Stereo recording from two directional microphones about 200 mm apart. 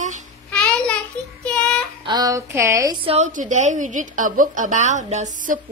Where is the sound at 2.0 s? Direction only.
20° right (ahead or behind).